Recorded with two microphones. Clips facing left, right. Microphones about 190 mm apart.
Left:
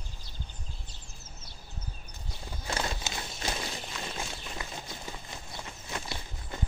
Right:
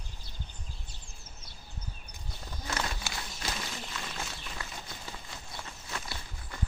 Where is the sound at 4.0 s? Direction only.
20° left (ahead or behind).